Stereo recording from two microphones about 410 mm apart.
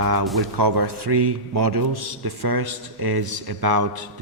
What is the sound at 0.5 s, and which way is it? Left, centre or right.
A man's voice, right.